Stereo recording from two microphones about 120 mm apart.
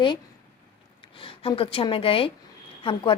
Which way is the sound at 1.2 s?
50° left (ahead or behind).